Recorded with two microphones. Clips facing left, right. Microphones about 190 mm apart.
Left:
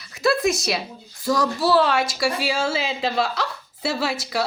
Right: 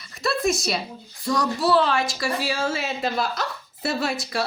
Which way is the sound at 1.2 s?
5° left (ahead or behind).